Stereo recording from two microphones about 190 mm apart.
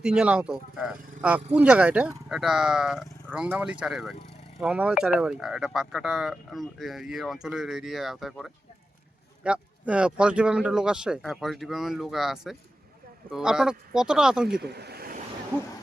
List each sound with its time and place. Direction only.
0.0 s speech: 5° right (ahead or behind)
14.5 s speech: 60° right (ahead or behind)